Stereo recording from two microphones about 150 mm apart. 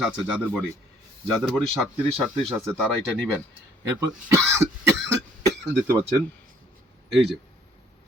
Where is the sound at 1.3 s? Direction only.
Centre (ahead or behind).